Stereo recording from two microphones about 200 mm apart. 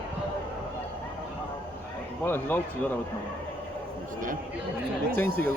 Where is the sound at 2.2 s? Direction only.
10° left (ahead or behind).